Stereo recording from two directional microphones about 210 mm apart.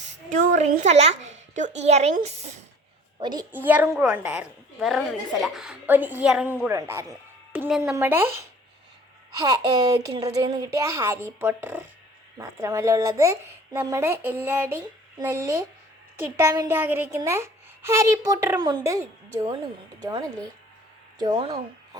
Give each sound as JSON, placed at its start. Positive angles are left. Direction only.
{"t": 0.3, "sound": "a woman's voice", "side_deg": -35}
{"t": 3.2, "sound": "a woman's voice", "side_deg": -20}
{"t": 3.5, "sound": "a woman's voice", "side_deg": -10}
{"t": 9.4, "sound": "a woman's voice", "side_deg": -20}